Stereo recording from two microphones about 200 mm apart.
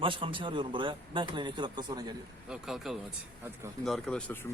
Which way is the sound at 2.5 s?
Centre (ahead or behind).